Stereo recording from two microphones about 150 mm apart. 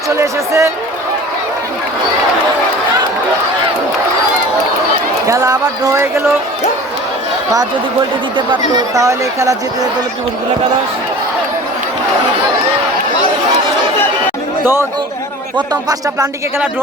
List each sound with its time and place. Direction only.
0.2 s speech: 20° right (ahead or behind)
5.3 s speech: 20° right (ahead or behind)
8.4 s speech: 30° right (ahead or behind)
14.6 s speech: 15° right (ahead or behind)